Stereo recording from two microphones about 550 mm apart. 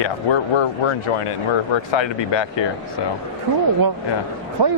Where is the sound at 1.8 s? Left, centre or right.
Left.